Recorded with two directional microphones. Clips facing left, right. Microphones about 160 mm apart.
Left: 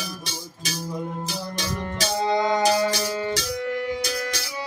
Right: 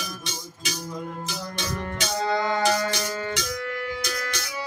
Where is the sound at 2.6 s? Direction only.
35° left (ahead or behind).